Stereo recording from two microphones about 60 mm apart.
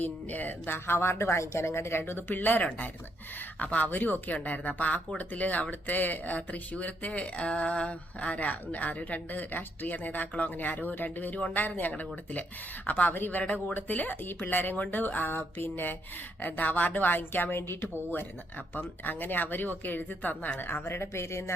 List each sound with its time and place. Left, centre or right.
0.0 s speech: left